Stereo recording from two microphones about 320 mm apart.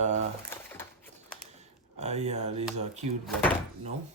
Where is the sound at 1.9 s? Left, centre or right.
Right.